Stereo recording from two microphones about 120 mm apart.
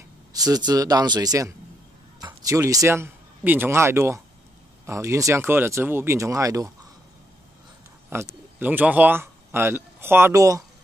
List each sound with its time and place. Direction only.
0.3 s a sound: 30° right (ahead or behind)
0.7 s speech: 35° right (ahead or behind)
8.1 s a man's voice: 20° right (ahead or behind)